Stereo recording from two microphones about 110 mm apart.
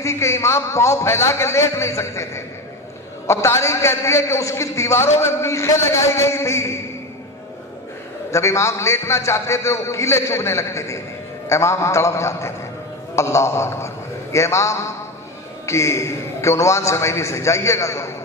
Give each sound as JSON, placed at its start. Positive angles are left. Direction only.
{"t": 0.0, "sound": "a man's voice", "side_deg": 25}
{"t": 8.3, "sound": "a man's voice", "side_deg": 25}